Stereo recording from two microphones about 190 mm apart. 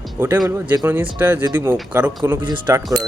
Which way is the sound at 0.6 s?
20° right (ahead or behind).